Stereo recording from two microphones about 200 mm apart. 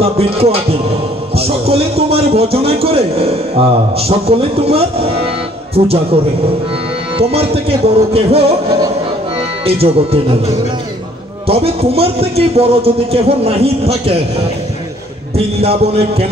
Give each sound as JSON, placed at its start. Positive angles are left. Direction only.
{"t": 0.0, "sound": "a man's voice", "side_deg": -30}
{"t": 7.2, "sound": "a man's voice", "side_deg": -30}
{"t": 9.7, "sound": "a man's voice", "side_deg": -30}
{"t": 11.4, "sound": "a man's voice", "side_deg": -30}
{"t": 15.3, "sound": "a man's voice", "side_deg": -30}